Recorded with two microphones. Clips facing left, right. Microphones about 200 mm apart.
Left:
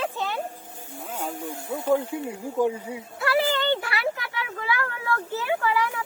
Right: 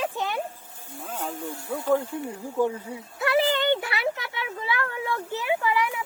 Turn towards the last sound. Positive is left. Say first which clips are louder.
# even
turn(degrees=-15)  # may be behind; listen again after turning